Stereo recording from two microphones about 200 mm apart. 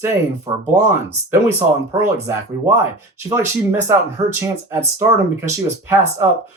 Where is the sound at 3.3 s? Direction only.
15° right (ahead or behind).